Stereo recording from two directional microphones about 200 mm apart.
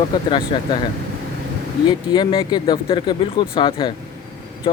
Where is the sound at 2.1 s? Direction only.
20° left (ahead or behind).